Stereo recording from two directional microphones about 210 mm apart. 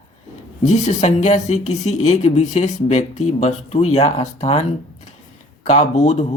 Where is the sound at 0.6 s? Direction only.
35° left (ahead or behind).